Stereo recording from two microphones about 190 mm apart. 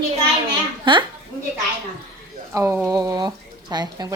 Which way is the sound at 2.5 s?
15° right (ahead or behind).